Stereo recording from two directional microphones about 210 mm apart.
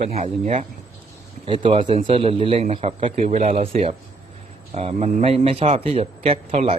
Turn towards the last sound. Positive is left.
turn(degrees=-30)  # may be behind; listen again after turning